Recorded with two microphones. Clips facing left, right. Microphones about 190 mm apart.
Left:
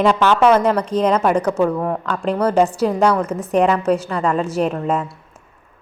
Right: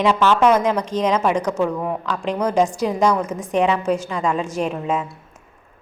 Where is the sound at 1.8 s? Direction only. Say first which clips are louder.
Left 3 dB; 10° right (ahead or behind).